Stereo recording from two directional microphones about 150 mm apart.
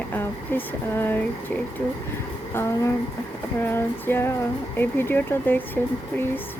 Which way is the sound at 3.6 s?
15° left (ahead or behind).